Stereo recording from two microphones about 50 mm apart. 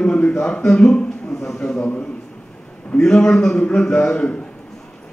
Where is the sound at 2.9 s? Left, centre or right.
Centre.